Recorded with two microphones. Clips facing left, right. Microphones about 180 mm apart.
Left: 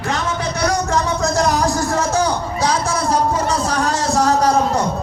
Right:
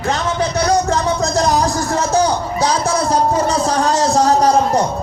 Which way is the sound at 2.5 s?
20° right (ahead or behind).